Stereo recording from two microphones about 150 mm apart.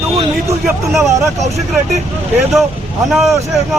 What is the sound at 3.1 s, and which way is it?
Speech, centre (ahead or behind).